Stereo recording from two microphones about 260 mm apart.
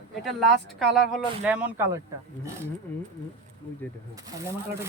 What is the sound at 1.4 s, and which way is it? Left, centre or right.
Speech, centre.